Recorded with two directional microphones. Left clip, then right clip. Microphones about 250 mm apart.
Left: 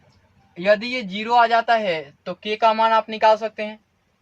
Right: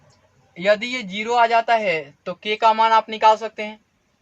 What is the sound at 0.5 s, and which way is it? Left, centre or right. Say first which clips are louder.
A man's voice: even; centre.